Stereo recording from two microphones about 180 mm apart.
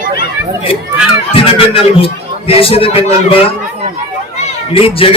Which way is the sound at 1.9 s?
30° left (ahead or behind).